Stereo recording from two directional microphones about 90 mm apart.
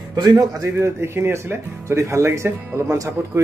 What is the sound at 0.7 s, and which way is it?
A man's voice, 30° right (ahead or behind).